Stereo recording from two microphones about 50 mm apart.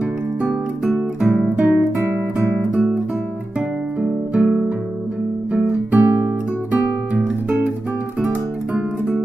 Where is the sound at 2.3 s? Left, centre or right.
Right.